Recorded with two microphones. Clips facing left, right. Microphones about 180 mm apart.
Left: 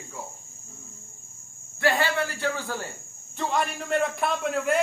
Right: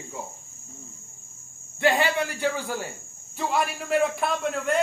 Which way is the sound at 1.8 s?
20° right (ahead or behind).